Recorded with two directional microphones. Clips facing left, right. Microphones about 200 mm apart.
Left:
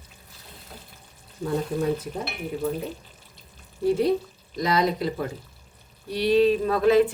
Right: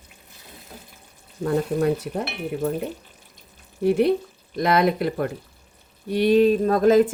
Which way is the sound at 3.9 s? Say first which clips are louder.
Right 3 dB; 65° right (ahead or behind).